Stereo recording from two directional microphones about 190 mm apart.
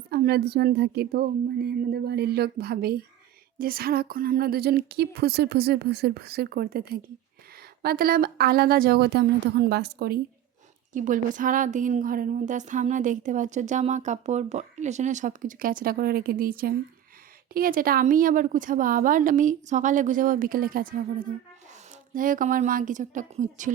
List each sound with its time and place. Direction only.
0.1 s speech: 55° right (ahead or behind)
10.9 s a woman's voice: 45° right (ahead or behind)